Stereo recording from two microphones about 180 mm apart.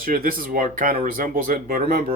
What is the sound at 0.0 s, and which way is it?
Speech, 55° right (ahead or behind).